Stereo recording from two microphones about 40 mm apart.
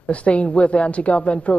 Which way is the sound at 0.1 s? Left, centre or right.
Left.